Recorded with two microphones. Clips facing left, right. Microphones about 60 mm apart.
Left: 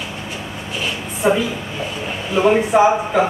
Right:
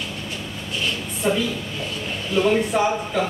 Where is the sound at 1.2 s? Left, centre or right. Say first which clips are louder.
Left 6 dB; left.